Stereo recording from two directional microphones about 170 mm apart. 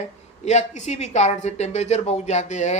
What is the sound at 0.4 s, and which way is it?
A woman's voice, 45° left (ahead or behind).